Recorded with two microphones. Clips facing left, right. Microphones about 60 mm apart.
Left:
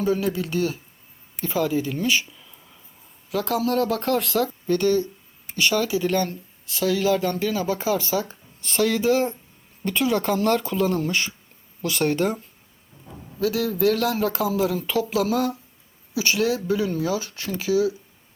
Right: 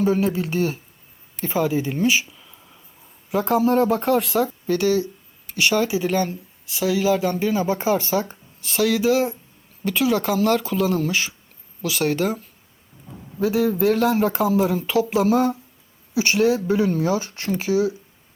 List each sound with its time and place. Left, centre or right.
0.0 s speech: right; by 2.8 s centre
3.2 s speech: right
4.0 s speech: centre
5.5 s speech: right
8.6 s speech: centre
13.4 s speech: right
15.1 s speech: right